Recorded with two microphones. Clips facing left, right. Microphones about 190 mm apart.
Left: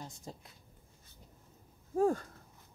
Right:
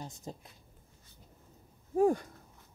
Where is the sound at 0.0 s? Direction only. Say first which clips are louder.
Right 3 dB; 20° right (ahead or behind).